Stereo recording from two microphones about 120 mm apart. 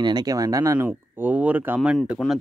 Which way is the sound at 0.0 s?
35° right (ahead or behind).